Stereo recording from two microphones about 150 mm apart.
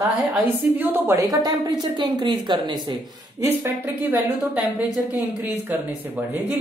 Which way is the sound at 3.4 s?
15° right (ahead or behind).